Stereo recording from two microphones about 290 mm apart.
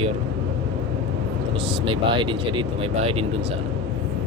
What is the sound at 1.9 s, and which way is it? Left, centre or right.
Speech, centre.